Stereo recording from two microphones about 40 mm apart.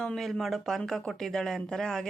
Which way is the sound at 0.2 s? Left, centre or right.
Centre.